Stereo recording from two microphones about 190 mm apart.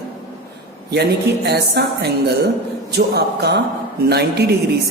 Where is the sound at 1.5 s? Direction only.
60° right (ahead or behind).